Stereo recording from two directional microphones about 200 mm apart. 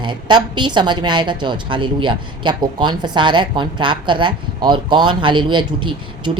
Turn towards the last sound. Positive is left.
turn(degrees=-25)  # may be behind; listen again after turning